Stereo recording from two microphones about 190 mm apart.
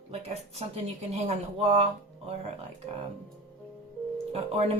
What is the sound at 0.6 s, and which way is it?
Speech, 35° right (ahead or behind).